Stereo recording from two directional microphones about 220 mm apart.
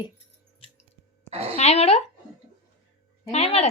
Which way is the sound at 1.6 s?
30° left (ahead or behind).